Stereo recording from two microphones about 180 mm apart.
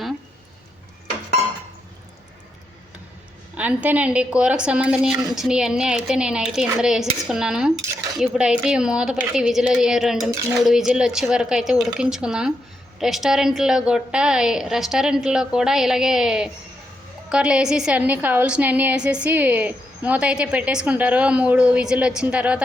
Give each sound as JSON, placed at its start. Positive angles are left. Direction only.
{"t": 3.5, "sound": "a woman's voice", "side_deg": -10}